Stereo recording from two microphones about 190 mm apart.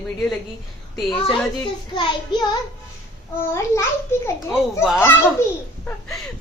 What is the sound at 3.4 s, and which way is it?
Speech, 15° left (ahead or behind).